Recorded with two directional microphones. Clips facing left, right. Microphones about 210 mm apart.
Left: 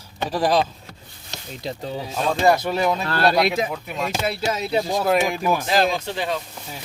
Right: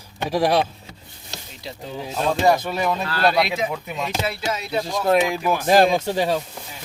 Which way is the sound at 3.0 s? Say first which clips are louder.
Left 1 dB; 45° left (ahead or behind).